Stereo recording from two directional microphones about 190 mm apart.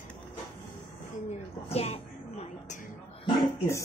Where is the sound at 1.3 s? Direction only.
35° left (ahead or behind).